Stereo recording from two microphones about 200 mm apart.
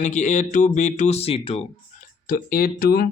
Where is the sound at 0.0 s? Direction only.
35° left (ahead or behind).